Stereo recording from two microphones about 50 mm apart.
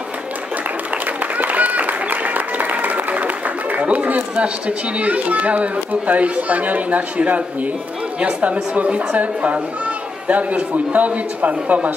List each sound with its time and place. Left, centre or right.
1.0 s applause: right
8.2 s speech: right